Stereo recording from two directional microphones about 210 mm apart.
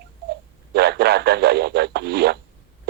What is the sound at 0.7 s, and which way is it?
Speech, 50° right (ahead or behind).